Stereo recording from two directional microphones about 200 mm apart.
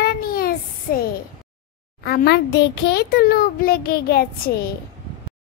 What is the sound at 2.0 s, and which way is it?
A child's voice, 55° left (ahead or behind).